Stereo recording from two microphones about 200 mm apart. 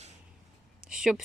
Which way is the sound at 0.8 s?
5° right (ahead or behind).